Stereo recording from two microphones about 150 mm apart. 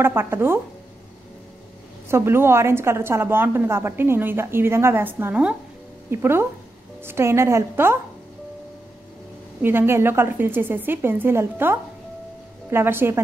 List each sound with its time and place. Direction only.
0.0 s a woman's voice: 15° right (ahead or behind)
2.0 s a woman's voice: 15° right (ahead or behind)
9.6 s a woman's voice: 15° right (ahead or behind)